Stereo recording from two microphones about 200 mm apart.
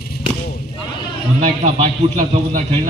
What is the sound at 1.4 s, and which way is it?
A man's voice, 35° right (ahead or behind).